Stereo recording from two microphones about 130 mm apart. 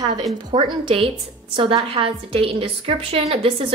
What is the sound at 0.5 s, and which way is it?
A woman's voice, 40° right (ahead or behind).